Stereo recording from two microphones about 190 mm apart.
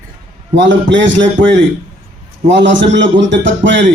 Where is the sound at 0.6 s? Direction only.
75° right (ahead or behind).